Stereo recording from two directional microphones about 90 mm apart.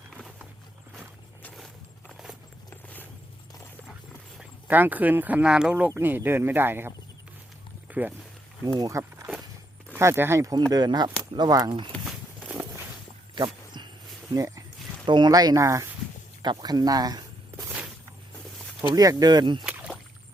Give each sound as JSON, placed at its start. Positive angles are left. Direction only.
{"t": 1.5, "sound": "walk", "side_deg": 5}
{"t": 4.7, "sound": "speech", "side_deg": -20}
{"t": 5.9, "sound": "speech", "side_deg": -25}
{"t": 7.9, "sound": "a sound", "side_deg": -20}
{"t": 8.6, "sound": "speech", "side_deg": -45}
{"t": 10.0, "sound": "speech", "side_deg": -30}
{"t": 10.7, "sound": "speech", "side_deg": -50}
{"t": 13.3, "sound": "a sound", "side_deg": -60}
{"t": 14.3, "sound": "speech", "side_deg": -40}
{"t": 15.0, "sound": "speech", "side_deg": -55}
{"t": 16.4, "sound": "speech", "side_deg": -55}
{"t": 18.9, "sound": "speech", "side_deg": -45}